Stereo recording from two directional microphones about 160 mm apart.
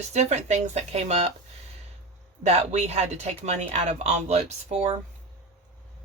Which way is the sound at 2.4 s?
45° right (ahead or behind).